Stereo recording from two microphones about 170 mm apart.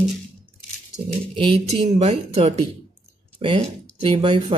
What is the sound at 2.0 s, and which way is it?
Speech, 40° right (ahead or behind).